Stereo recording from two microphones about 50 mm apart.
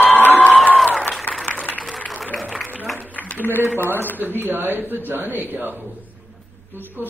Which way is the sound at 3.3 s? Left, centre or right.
Left.